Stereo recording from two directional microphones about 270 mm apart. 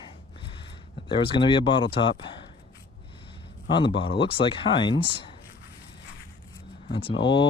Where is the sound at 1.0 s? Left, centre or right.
Centre.